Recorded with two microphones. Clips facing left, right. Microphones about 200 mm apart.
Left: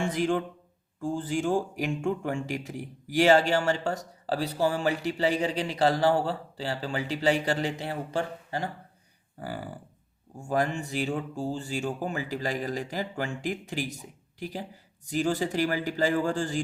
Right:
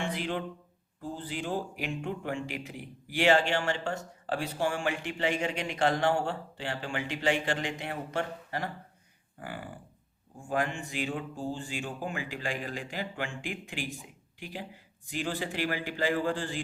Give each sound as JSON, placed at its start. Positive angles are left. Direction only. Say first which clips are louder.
{"t": 0.0, "sound": "a man's voice", "louder": "left 6 dB", "side_deg": 45}